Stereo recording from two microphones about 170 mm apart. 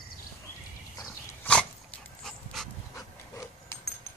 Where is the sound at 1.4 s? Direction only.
5° left (ahead or behind).